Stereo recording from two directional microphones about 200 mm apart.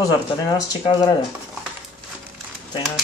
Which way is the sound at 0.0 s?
20° left (ahead or behind).